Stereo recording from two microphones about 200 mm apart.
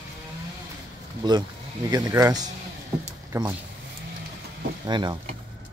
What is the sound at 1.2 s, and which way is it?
Speech, 20° right (ahead or behind).